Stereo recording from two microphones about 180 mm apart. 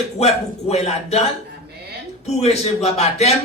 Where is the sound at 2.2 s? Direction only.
35° left (ahead or behind).